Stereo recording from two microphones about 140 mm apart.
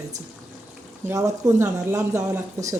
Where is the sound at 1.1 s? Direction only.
20° right (ahead or behind).